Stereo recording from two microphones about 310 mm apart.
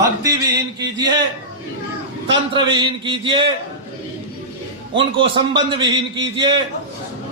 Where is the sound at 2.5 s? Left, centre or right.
Centre.